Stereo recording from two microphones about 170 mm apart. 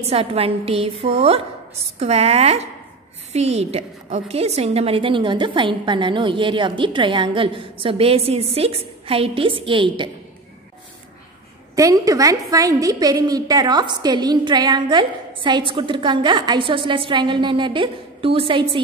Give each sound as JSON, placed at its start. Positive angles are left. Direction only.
{"t": 0.0, "sound": "a woman's voice", "side_deg": -35}
{"t": 11.7, "sound": "a woman's voice", "side_deg": -20}